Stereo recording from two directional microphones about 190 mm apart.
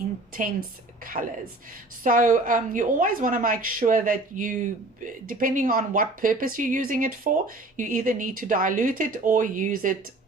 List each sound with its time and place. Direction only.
1.2 s a woman's voice: 40° right (ahead or behind)